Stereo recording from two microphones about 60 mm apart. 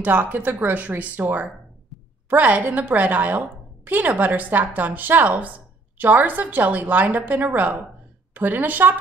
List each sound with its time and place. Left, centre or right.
0.0 s a woman's voice: right